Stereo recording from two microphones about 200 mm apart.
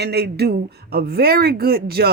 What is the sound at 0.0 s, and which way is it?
Speech, 55° right (ahead or behind).